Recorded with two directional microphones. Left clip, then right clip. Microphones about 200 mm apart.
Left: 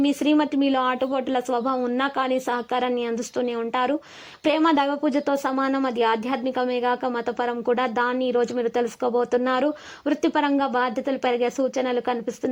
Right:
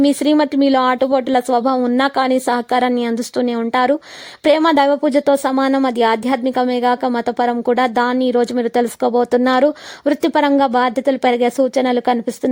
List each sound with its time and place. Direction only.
0.0 s speech: 40° right (ahead or behind)